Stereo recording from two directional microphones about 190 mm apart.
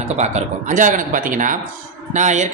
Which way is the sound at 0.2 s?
40° right (ahead or behind).